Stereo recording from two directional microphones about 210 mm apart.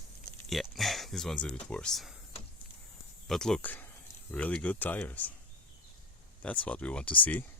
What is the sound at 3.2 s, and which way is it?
Speech, centre (ahead or behind).